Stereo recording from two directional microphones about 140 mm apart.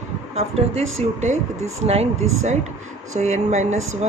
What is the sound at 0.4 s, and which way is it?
Speech, 50° right (ahead or behind).